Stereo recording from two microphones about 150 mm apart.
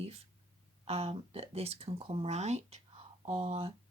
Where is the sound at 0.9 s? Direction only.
45° right (ahead or behind).